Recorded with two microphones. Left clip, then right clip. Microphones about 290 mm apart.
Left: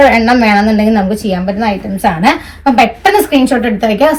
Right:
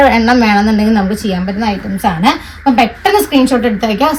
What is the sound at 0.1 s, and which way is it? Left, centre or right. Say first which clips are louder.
Speech: left 1 dB; right.